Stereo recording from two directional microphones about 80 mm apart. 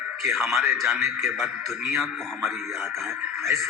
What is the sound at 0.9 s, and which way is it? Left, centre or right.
Speech, right.